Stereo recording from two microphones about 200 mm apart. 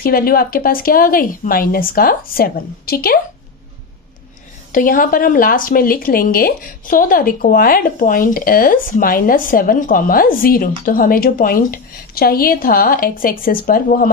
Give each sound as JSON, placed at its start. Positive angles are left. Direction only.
{"t": 0.0, "sound": "speech", "side_deg": 45}
{"t": 4.7, "sound": "speech", "side_deg": 45}